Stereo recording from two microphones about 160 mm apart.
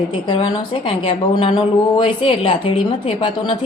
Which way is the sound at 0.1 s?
30° left (ahead or behind).